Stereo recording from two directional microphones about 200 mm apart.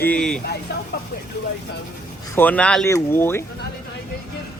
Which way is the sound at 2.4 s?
5° left (ahead or behind).